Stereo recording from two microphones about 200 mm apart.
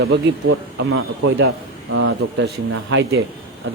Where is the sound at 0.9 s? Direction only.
70° right (ahead or behind).